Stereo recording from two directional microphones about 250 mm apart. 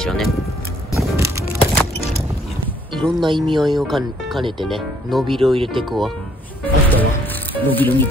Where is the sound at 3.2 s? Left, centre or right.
Centre.